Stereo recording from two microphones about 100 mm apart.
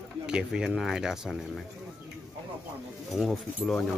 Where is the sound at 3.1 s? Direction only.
Centre (ahead or behind).